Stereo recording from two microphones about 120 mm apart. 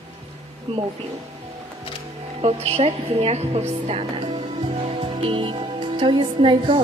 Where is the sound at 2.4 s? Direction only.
60° right (ahead or behind).